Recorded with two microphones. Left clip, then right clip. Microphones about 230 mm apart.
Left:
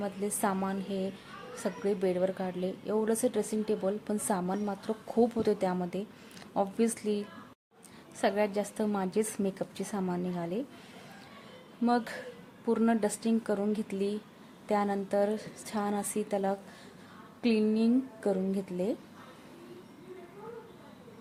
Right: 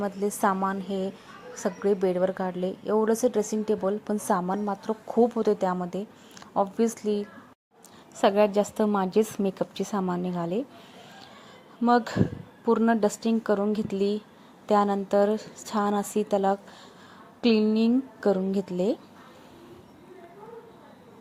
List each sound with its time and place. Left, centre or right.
0.0 s a woman's voice: centre
11.9 s a woman's voice: centre